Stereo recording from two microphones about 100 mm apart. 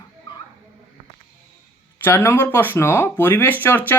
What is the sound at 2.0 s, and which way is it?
Speech, 25° left (ahead or behind).